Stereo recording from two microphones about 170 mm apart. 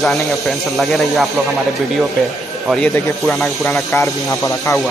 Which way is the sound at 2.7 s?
10° left (ahead or behind).